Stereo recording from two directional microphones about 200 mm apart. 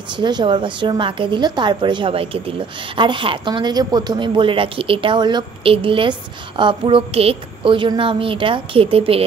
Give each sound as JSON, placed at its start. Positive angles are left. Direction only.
{"t": 0.2, "sound": "speech", "side_deg": -20}